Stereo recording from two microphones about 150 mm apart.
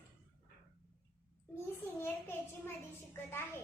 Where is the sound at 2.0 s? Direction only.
15° left (ahead or behind).